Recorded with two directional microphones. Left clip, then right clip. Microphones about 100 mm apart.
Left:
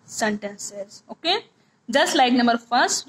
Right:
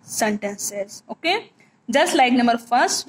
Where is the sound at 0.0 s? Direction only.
30° right (ahead or behind).